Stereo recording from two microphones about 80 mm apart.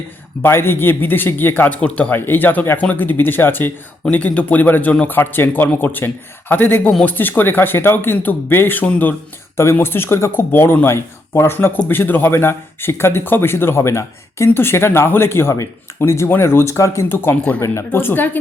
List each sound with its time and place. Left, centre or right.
0.4 s a man's voice: left